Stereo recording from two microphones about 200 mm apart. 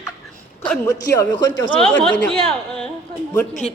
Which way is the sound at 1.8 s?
5° left (ahead or behind).